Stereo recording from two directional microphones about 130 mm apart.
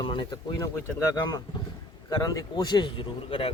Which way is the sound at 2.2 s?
30° left (ahead or behind).